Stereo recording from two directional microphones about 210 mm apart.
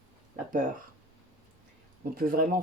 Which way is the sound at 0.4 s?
40° right (ahead or behind).